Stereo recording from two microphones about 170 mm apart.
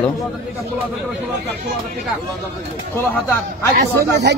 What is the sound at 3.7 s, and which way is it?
Speech, 75° right (ahead or behind).